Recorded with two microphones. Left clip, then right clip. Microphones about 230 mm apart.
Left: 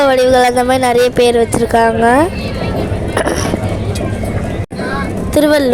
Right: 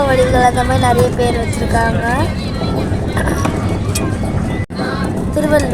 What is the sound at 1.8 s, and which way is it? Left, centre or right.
Speech, left.